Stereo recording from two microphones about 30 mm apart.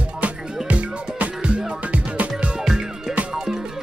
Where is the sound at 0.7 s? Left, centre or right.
Right.